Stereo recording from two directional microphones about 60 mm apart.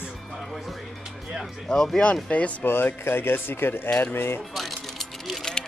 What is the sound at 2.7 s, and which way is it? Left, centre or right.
Speech, left.